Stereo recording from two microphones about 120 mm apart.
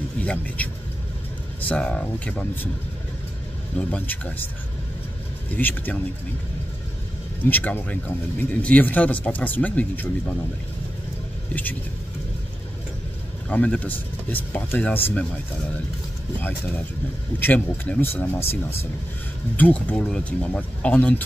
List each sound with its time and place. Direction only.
0.2 s speech: 10° left (ahead or behind)
3.7 s speech: 10° left (ahead or behind)
5.5 s speech: 15° left (ahead or behind)
7.4 s speech: 15° left (ahead or behind)
13.5 s speech: 10° left (ahead or behind)
17.4 s speech: 15° left (ahead or behind)